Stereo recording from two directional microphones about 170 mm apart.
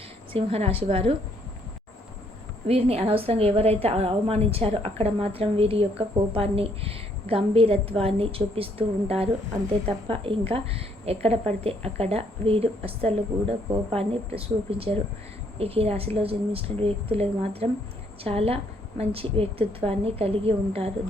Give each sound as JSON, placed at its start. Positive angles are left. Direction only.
{"t": 0.3, "sound": "a woman's voice", "side_deg": -35}
{"t": 2.6, "sound": "a woman's voice", "side_deg": -35}